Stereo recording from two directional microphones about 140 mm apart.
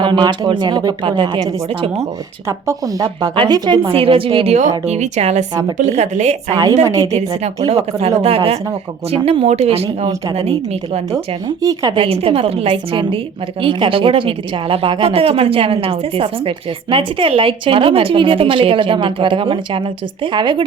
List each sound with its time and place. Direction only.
0.0 s a woman's voice: 35° right (ahead or behind)
2.5 s a woman's voice: 20° right (ahead or behind); by 4.5 s 40° right (ahead or behind)
4.9 s a woman's voice: 55° right (ahead or behind)
6.5 s speech: 25° right (ahead or behind)
7.1 s speech: 50° right (ahead or behind)
11.6 s speech: 25° right (ahead or behind)
11.9 s a woman's voice: 45° right (ahead or behind)